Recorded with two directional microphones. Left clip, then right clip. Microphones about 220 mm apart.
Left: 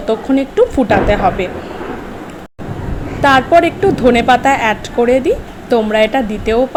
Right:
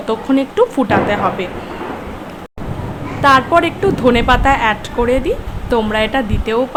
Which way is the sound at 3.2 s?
5° left (ahead or behind).